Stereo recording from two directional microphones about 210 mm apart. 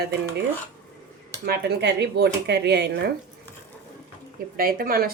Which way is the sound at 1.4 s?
50° right (ahead or behind).